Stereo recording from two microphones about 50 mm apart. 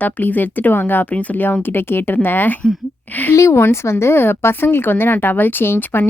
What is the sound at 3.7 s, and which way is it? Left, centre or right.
Speech, left.